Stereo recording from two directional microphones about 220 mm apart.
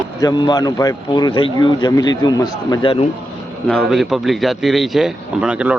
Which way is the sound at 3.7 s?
Centre (ahead or behind).